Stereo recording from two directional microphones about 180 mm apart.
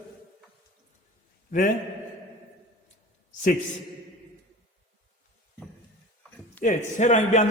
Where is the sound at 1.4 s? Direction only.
45° left (ahead or behind).